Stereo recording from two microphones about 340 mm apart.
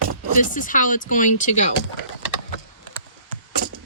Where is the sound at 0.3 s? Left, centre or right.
Left.